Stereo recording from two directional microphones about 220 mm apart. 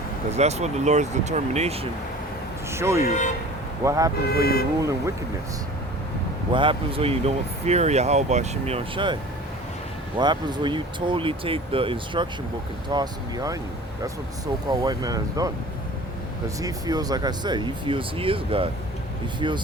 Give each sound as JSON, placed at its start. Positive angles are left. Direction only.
{"t": 0.3, "sound": "speech", "side_deg": -30}
{"t": 2.6, "sound": "speech", "side_deg": -10}
{"t": 3.0, "sound": "speech", "side_deg": 35}
{"t": 3.8, "sound": "speech", "side_deg": -15}
{"t": 4.3, "sound": "speech", "side_deg": 45}
{"t": 6.5, "sound": "speech", "side_deg": -20}
{"t": 10.2, "sound": "speech", "side_deg": -20}
{"t": 16.6, "sound": "speech", "side_deg": -15}